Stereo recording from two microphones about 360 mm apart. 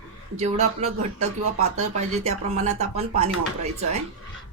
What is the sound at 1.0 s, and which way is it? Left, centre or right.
Speech, right.